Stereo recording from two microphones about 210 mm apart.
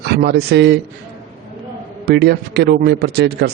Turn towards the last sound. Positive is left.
turn(degrees=-50)  # may be behind; listen again after turning